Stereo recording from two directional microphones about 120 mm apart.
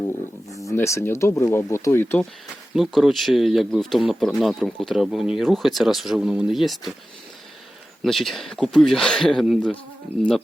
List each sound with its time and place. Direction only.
0.7 s speech: 25° left (ahead or behind)
2.7 s speech: centre (ahead or behind)
8.0 s speech: centre (ahead or behind)